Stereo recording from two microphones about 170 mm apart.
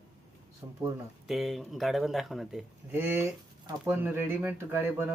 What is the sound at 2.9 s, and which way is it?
Speech, 10° right (ahead or behind).